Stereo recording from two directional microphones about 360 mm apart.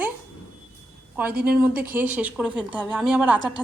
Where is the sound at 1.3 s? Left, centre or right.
Right.